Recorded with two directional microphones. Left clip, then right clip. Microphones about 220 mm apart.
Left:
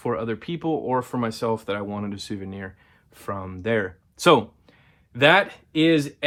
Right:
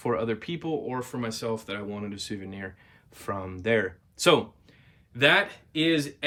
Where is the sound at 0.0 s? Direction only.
Centre (ahead or behind).